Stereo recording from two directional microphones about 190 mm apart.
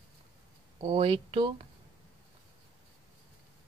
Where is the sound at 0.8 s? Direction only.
25° right (ahead or behind).